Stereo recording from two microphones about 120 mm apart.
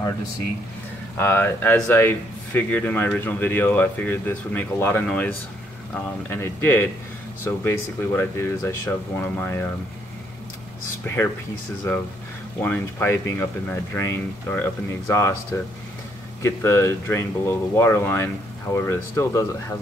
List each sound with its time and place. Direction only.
1.1 s speech: 20° left (ahead or behind)
6.3 s speech: 20° left (ahead or behind)
11.1 s speech: 25° left (ahead or behind)
16.4 s speech: 25° left (ahead or behind)